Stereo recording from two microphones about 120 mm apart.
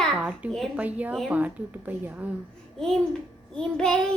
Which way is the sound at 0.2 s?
10° right (ahead or behind).